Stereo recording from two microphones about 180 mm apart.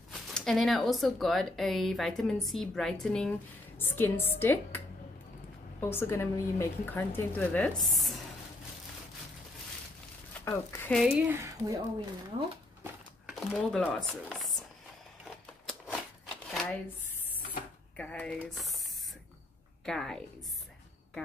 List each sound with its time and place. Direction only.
0.1 s a woman's voice: centre (ahead or behind)
10.4 s a woman's voice: 15° left (ahead or behind)
11.0 s speech: 5° right (ahead or behind)
13.5 s speech: 5° left (ahead or behind)
15.2 s a sound: centre (ahead or behind)
16.4 s shuffling cards: centre (ahead or behind)
17.9 s speech: 5° left (ahead or behind)
19.8 s a woman's voice: centre (ahead or behind)